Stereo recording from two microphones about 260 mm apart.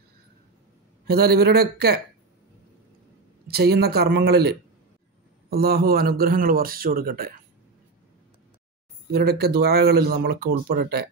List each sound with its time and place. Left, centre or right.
1.0 s speech: right
3.4 s speech: right
9.1 s speech: right